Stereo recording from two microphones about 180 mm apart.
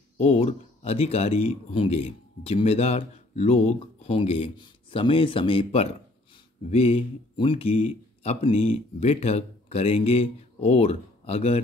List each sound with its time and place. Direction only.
0.2 s speech: 35° left (ahead or behind)